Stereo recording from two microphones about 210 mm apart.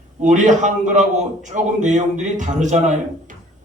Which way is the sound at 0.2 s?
35° right (ahead or behind).